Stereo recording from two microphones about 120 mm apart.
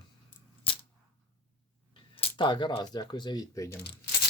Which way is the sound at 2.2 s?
40° left (ahead or behind).